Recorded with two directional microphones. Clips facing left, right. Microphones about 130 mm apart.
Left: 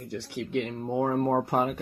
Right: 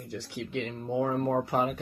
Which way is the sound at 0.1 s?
65° left (ahead or behind).